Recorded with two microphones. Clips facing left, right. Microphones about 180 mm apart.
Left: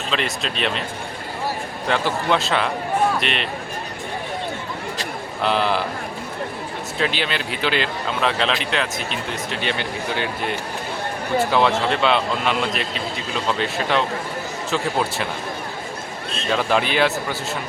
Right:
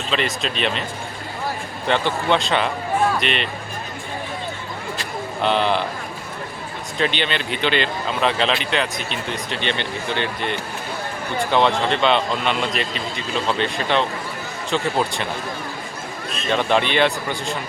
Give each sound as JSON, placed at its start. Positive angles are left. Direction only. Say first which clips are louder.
{"t": 0.1, "sound": "speech", "louder": "right 2 dB", "side_deg": 0}
{"t": 1.9, "sound": "speech", "louder": "right 1 dB", "side_deg": 5}
{"t": 5.4, "sound": "speech", "louder": "right 1 dB", "side_deg": 0}
{"t": 7.0, "sound": "speech", "louder": "right 2 dB", "side_deg": 5}
{"t": 16.5, "sound": "speech", "louder": "right 1 dB", "side_deg": 5}